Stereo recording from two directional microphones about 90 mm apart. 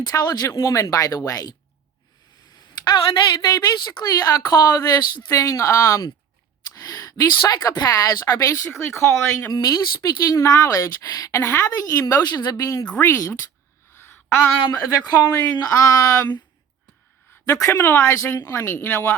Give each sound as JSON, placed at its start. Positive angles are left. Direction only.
{"t": 0.0, "sound": "a woman's voice", "side_deg": 45}
{"t": 2.8, "sound": "a woman's voice", "side_deg": 55}
{"t": 9.5, "sound": "a woman's voice", "side_deg": 50}
{"t": 13.0, "sound": "speech", "side_deg": 30}
{"t": 13.9, "sound": "a sound", "side_deg": 25}
{"t": 15.2, "sound": "speech", "side_deg": 30}
{"t": 17.4, "sound": "speech", "side_deg": 35}